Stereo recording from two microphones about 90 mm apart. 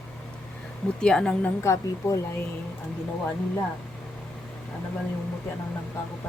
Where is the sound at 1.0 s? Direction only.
10° left (ahead or behind).